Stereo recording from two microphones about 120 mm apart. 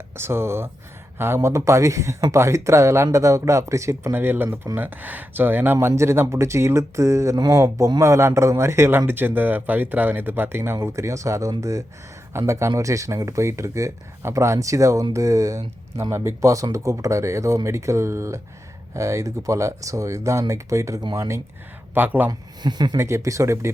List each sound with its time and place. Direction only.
0.2 s speech: 20° right (ahead or behind)
22.3 s speech: 35° right (ahead or behind)
23.0 s speech: 25° right (ahead or behind)